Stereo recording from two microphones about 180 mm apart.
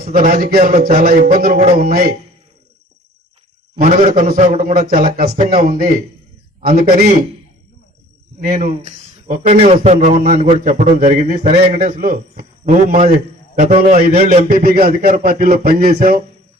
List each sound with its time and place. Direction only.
0.1 s a man's voice: 50° right (ahead or behind)
0.6 s a man's voice: 35° right (ahead or behind)
0.9 s a man's voice: 45° right (ahead or behind)
3.8 s a man's voice: 35° right (ahead or behind)
4.1 s a man's voice: 50° right (ahead or behind)
5.1 s a man's voice: 50° right (ahead or behind)
8.4 s a man's voice: 40° right (ahead or behind)
14.6 s a man's voice: 60° right (ahead or behind)